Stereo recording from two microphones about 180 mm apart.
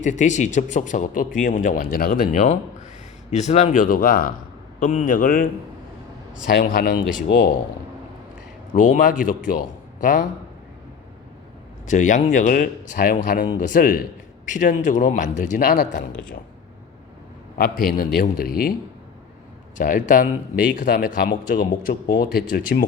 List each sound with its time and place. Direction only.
0.0 s speech: 40° left (ahead or behind)
6.5 s a man's voice: 55° left (ahead or behind)
8.7 s a man's voice: 45° left (ahead or behind)
11.9 s a man's voice: 45° left (ahead or behind)
15.9 s speech: 45° left (ahead or behind)
17.6 s a man's voice: 55° left (ahead or behind)
19.7 s speech: 45° left (ahead or behind)